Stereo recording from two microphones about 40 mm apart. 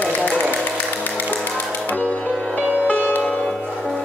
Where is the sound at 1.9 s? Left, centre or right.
Left.